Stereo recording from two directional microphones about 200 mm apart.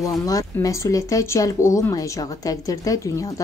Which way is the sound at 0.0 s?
15° left (ahead or behind).